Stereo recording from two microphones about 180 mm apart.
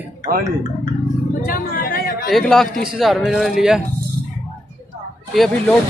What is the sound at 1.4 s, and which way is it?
Chatter, 50° left (ahead or behind).